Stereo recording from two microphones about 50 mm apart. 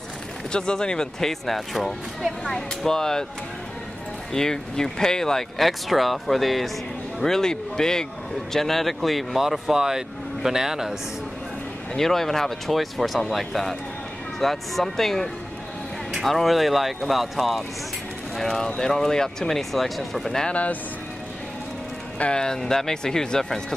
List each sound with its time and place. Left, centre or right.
0.5 s speech: centre
4.3 s speech: centre
11.9 s speech: centre
16.1 s a sound: centre
16.3 s speech: centre
18.4 s speech: centre
22.2 s speech: centre